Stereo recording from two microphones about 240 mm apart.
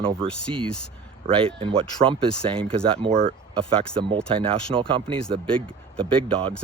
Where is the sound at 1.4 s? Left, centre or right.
Right.